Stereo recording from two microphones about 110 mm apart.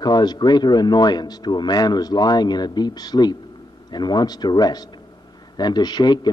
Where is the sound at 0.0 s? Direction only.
40° left (ahead or behind).